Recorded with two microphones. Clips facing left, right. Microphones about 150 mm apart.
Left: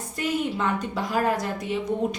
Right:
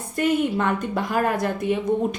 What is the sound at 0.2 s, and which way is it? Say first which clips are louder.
A woman's voice: right 5 dB; 55° right (ahead or behind).